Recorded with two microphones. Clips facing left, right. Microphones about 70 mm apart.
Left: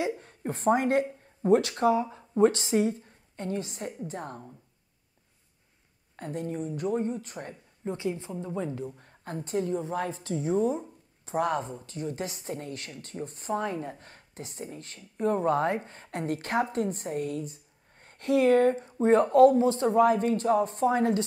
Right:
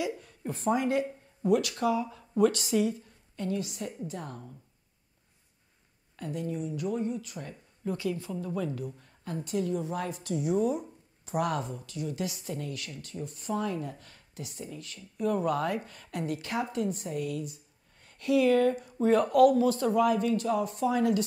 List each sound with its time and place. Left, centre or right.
0.0 s a woman's voice: left
6.1 s a woman's voice: left
9.0 s a woman's voice: left